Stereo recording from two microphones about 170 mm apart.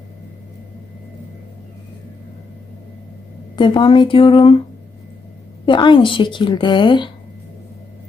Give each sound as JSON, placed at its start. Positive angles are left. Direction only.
{"t": 3.5, "sound": "a woman's voice", "side_deg": 30}
{"t": 5.6, "sound": "a woman's voice", "side_deg": 30}